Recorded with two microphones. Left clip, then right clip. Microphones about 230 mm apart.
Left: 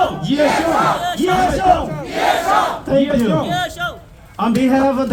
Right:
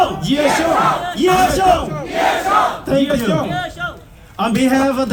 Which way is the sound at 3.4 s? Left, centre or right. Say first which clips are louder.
Left 2 dB; left.